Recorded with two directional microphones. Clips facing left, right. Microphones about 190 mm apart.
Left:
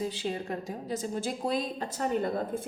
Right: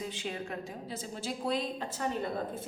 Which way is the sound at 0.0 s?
35° left (ahead or behind).